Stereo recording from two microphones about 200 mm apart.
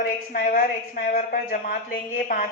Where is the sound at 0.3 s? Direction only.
45° left (ahead or behind).